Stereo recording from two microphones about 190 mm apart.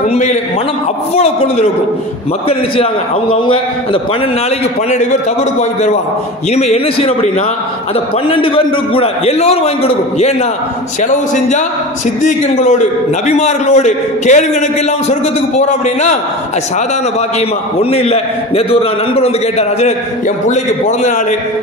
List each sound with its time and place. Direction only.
0.1 s a man's voice: 35° left (ahead or behind)
5.6 s a man's voice: 40° left (ahead or behind)
17.7 s a man's voice: 30° left (ahead or behind)